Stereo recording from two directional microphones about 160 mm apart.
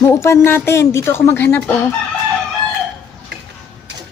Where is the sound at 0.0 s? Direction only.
15° left (ahead or behind).